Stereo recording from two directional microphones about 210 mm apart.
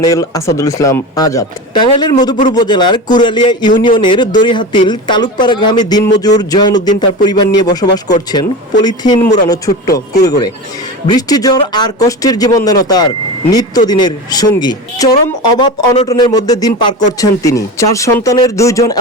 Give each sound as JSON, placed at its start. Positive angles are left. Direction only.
{"t": 0.0, "sound": "speech", "side_deg": 15}